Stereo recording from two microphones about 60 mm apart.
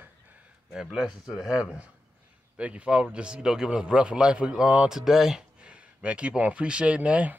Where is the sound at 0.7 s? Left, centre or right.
Centre.